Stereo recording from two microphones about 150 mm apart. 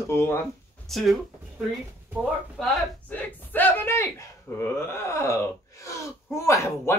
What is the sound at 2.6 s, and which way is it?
A woman's voice, 10° left (ahead or behind).